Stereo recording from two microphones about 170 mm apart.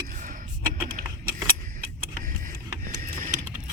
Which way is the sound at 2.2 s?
55° right (ahead or behind).